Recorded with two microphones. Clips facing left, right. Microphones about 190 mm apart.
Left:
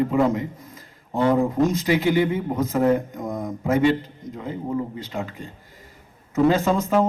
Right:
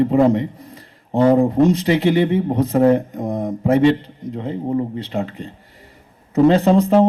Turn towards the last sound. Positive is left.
turn(degrees=-35)  # may be behind; listen again after turning